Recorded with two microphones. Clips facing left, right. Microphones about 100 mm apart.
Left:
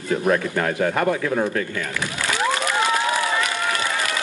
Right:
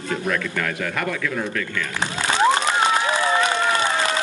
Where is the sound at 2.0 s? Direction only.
25° right (ahead or behind).